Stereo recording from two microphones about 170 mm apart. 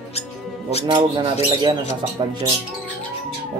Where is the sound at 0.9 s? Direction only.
30° right (ahead or behind).